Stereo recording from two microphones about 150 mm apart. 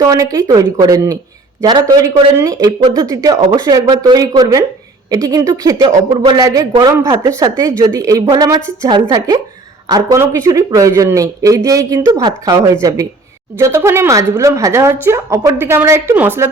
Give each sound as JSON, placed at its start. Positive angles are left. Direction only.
{"t": 0.0, "sound": "a woman's voice", "side_deg": -25}